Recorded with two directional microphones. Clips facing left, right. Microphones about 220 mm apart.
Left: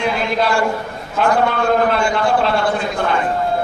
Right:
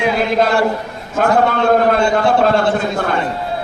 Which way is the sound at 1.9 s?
45° right (ahead or behind).